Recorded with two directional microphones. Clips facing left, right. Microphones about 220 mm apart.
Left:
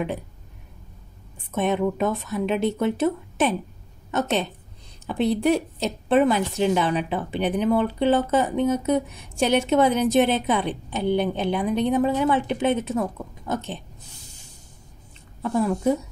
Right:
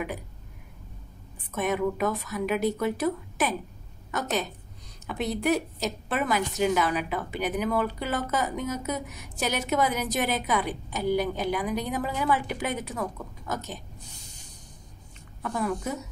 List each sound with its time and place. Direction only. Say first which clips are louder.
1.5 s a woman's voice: left 4 dB; 25° left (ahead or behind)
15.4 s a woman's voice: left 8 dB; 25° left (ahead or behind)